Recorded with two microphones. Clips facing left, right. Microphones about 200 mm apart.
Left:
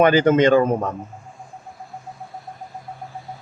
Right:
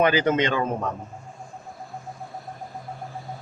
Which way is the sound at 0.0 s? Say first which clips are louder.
Left 6 dB; 50° left (ahead or behind).